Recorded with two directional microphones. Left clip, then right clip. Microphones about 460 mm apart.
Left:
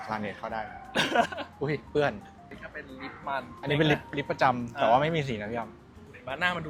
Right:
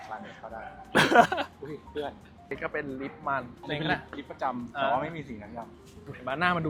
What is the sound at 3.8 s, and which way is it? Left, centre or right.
Speech, left.